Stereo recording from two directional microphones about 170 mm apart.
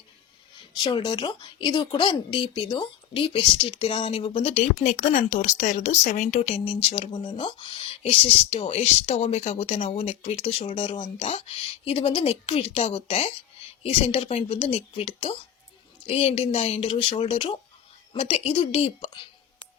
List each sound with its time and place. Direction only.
0.8 s speech: 25° left (ahead or behind); by 6.6 s 40° left (ahead or behind)
6.9 s speech: 30° left (ahead or behind)